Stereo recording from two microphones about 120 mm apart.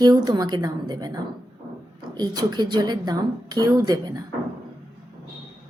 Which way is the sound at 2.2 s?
35° right (ahead or behind).